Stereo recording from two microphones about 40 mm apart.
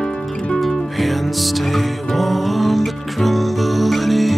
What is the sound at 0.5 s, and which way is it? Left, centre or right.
Music, centre.